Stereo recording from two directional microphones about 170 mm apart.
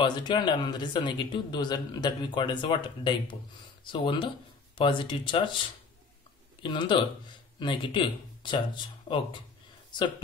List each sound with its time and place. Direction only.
0.0 s a man's voice: 25° left (ahead or behind)
6.6 s a man's voice: 25° left (ahead or behind)